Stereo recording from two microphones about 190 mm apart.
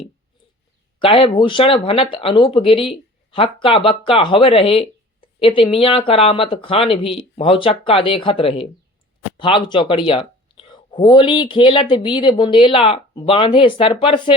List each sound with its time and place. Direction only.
0.9 s speech: 30° left (ahead or behind)